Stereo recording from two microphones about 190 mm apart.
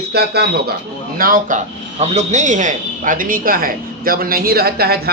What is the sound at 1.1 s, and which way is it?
A man's voice, 45° right (ahead or behind).